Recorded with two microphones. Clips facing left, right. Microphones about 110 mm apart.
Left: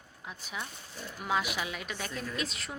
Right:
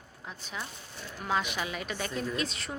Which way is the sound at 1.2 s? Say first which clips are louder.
Right 1 dB; 5° left (ahead or behind).